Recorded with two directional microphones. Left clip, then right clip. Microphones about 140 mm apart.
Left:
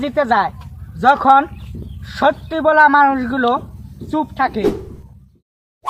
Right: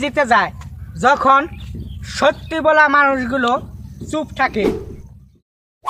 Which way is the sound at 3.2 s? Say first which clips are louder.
Even; 20° right (ahead or behind).